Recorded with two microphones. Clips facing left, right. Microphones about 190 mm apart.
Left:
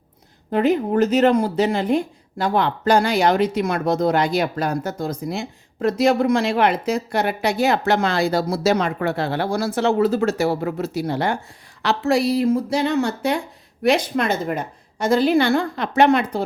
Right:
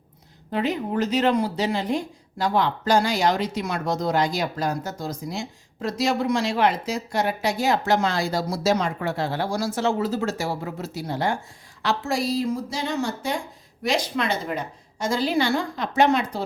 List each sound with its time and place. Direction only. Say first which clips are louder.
0.5 s speech: left 6 dB; 50° left (ahead or behind)
13.8 s speech: left 6 dB; 55° left (ahead or behind)